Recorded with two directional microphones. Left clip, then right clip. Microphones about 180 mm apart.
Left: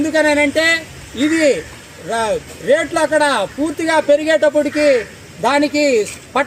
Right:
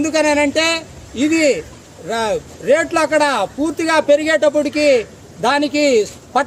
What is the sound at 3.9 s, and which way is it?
A man's voice, 35° right (ahead or behind).